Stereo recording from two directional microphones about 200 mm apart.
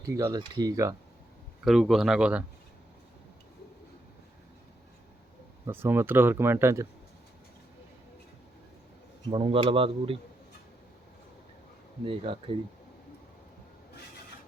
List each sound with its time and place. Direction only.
0.0 s speech: 15° right (ahead or behind)
1.6 s speech: centre (ahead or behind)
5.6 s speech: 10° right (ahead or behind)
9.3 s speech: 25° right (ahead or behind)
12.0 s speech: 25° right (ahead or behind)